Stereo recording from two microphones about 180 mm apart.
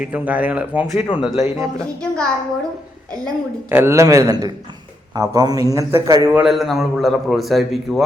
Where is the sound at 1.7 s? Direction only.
5° left (ahead or behind).